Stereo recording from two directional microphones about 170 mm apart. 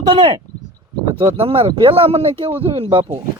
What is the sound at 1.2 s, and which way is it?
A man's voice, 35° right (ahead or behind).